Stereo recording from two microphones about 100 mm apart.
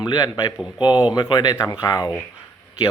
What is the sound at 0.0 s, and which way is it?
Speech, 45° left (ahead or behind).